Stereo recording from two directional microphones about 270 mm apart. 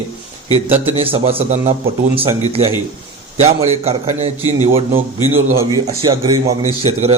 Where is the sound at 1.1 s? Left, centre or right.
Right.